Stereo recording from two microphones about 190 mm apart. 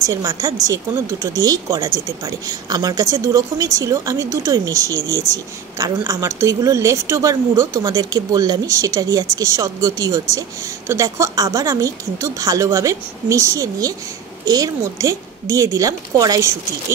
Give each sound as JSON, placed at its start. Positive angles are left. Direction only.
{"t": 0.0, "sound": "speech", "side_deg": -15}